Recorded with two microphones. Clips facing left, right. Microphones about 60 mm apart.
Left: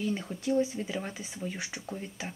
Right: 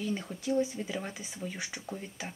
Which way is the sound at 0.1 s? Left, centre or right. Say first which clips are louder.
Left 2 dB; centre.